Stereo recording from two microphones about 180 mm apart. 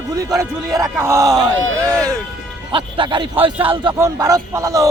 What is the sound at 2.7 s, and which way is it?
Speech, 30° right (ahead or behind).